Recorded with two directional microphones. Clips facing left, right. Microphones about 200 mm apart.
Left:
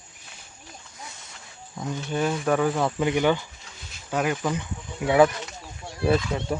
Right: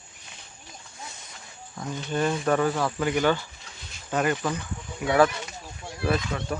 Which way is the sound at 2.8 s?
20° left (ahead or behind).